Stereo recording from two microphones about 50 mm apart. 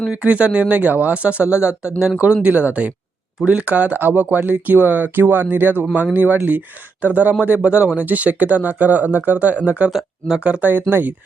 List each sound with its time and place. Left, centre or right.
0.1 s speech: right
2.4 s speech: right
9.9 s speech: centre
10.4 s speech: right